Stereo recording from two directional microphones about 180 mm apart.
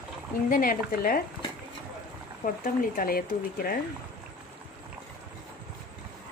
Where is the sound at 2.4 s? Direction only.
50° left (ahead or behind).